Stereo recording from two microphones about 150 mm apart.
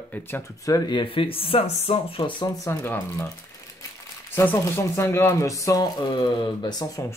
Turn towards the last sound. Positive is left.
turn(degrees=25)  # may be behind; listen again after turning